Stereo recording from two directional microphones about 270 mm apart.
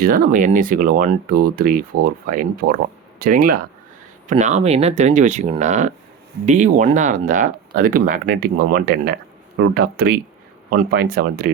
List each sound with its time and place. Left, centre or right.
0.0 s speech: right